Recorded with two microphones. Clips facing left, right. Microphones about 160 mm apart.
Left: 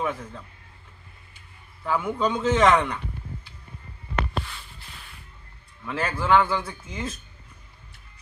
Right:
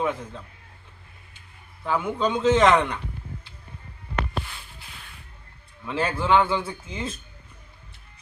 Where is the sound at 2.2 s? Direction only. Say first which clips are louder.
Right 2 dB; 25° right (ahead or behind).